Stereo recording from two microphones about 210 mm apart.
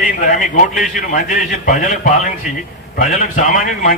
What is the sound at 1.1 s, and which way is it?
A man's voice, 40° left (ahead or behind).